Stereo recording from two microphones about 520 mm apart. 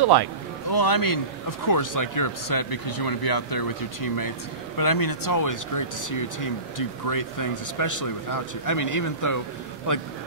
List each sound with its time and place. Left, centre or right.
0.0 s a man's voice: right
0.7 s speech: left